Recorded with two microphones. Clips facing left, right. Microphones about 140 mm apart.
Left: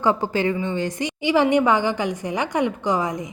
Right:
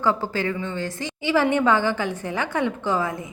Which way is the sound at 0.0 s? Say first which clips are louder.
Left 3 dB; 20° left (ahead or behind).